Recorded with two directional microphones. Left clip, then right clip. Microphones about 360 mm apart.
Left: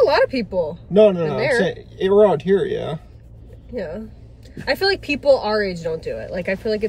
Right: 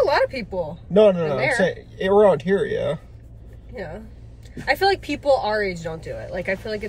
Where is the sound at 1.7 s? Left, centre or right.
Centre.